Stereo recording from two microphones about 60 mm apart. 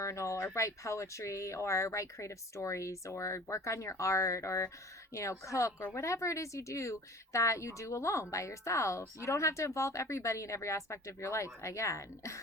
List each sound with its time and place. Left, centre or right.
0.0 s a woman's voice: left